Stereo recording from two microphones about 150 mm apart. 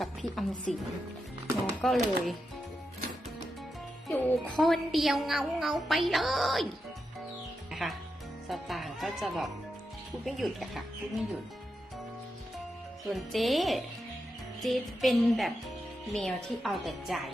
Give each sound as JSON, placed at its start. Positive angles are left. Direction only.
{"t": 0.0, "sound": "a woman's voice", "side_deg": 0}
{"t": 1.8, "sound": "a woman's voice", "side_deg": 0}
{"t": 4.1, "sound": "a woman's voice", "side_deg": 15}
{"t": 7.7, "sound": "music", "side_deg": 0}
{"t": 8.4, "sound": "a woman's voice", "side_deg": 0}
{"t": 13.1, "sound": "a woman's voice", "side_deg": 0}